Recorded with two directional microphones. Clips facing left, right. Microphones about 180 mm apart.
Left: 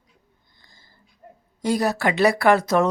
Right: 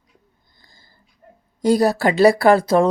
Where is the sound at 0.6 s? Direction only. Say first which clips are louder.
Right 3 dB; 35° right (ahead or behind).